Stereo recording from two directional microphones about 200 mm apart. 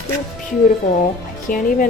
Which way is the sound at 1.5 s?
45° left (ahead or behind).